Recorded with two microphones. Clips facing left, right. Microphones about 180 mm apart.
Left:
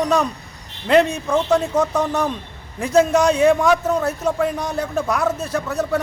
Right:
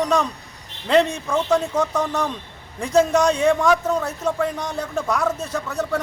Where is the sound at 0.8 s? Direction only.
5° left (ahead or behind).